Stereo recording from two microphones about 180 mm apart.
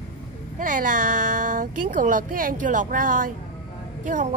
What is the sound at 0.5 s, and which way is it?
Speech, 45° right (ahead or behind).